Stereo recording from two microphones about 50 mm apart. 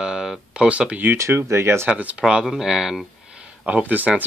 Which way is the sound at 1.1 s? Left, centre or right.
Right.